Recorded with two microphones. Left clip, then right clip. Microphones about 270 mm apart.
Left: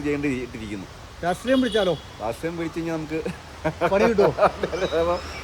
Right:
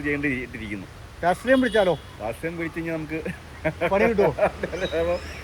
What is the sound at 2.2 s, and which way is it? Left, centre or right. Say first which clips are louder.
Speech: left 2 dB; centre.